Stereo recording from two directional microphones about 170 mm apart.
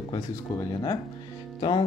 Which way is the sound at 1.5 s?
30° left (ahead or behind).